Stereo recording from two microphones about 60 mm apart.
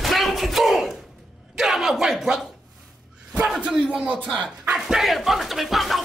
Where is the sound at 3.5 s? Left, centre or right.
Centre.